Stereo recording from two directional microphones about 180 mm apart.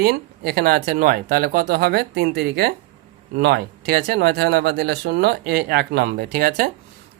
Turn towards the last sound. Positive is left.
turn(degrees=-55)  # may be behind; listen again after turning